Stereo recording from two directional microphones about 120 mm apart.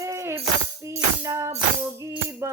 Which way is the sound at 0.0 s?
25° right (ahead or behind).